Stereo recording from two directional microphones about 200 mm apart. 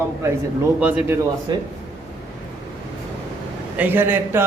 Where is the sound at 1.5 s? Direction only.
20° right (ahead or behind).